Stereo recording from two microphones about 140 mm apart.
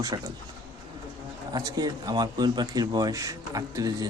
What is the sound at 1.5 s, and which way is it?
Speech, 30° right (ahead or behind).